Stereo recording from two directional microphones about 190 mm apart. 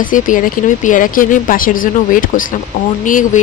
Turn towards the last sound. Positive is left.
turn(degrees=45)  # may be behind; listen again after turning